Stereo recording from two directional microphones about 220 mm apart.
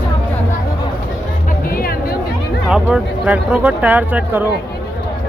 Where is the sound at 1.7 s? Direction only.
40° left (ahead or behind).